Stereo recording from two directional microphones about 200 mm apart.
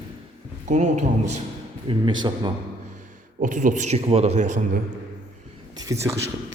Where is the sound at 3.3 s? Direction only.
40° right (ahead or behind).